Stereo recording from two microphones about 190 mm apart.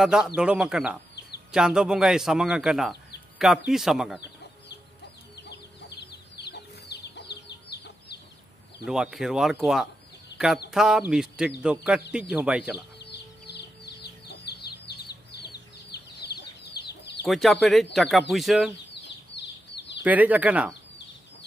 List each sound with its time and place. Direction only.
0.0 s a man's voice: 5° right (ahead or behind)
5.3 s chicken: 60° left (ahead or behind)
8.8 s a man's voice: 5° right (ahead or behind)
10.3 s a sound: 5° right (ahead or behind)
10.7 s a man's voice: 5° right (ahead or behind)
13.0 s chicken: 60° left (ahead or behind)
17.3 s a man's voice: centre (ahead or behind)
19.3 s chicken: 65° left (ahead or behind)
20.0 s speech: 10° right (ahead or behind)